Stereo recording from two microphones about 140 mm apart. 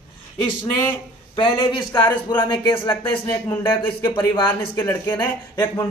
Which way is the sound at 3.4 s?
15° left (ahead or behind).